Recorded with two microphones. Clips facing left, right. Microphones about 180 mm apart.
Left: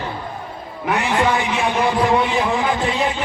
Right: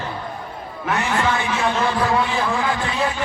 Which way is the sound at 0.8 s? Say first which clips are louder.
Left 3 dB; 15° left (ahead or behind).